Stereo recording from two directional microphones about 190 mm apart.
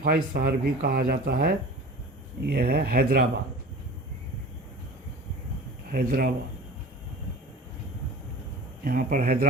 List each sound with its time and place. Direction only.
0.0 s speech: 55° right (ahead or behind)
5.9 s speech: 50° right (ahead or behind)
8.8 s speech: 50° right (ahead or behind)